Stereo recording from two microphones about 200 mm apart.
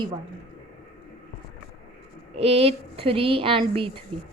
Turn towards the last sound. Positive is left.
turn(degrees=-30)  # may be behind; listen again after turning